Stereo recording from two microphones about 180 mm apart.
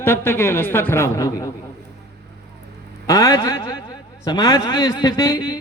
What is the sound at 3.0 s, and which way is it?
A man's voice, 20° left (ahead or behind).